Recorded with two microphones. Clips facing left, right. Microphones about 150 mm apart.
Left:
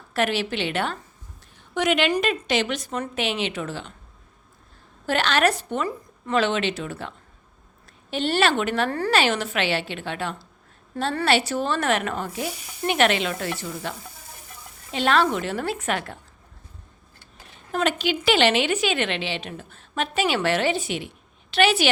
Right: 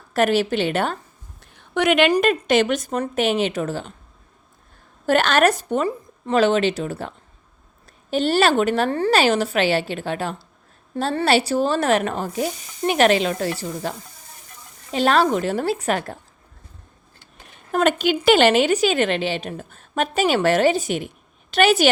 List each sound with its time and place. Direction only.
0.1 s a woman's voice: 45° right (ahead or behind)
1.4 s a sound: 60° right (ahead or behind)
2.1 s a woman's voice: 50° right (ahead or behind)
5.0 s a woman's voice: 45° right (ahead or behind)
8.1 s speech: 40° right (ahead or behind)
10.9 s a woman's voice: 30° right (ahead or behind)
14.9 s speech: 40° right (ahead or behind)
17.7 s a woman's voice: 50° right (ahead or behind)